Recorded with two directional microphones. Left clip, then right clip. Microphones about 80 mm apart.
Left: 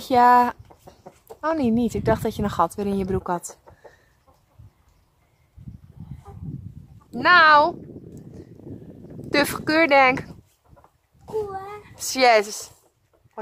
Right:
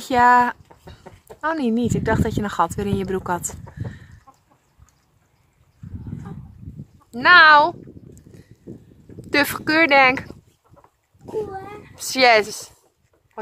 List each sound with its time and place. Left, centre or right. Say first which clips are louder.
0.0 s a woman's voice: right 1 dB; left
4.3 s chicken: right 8 dB; right
7.1 s speech: right 3 dB; left
9.3 s speech: right 2 dB; left
11.9 s speech: right 2 dB; centre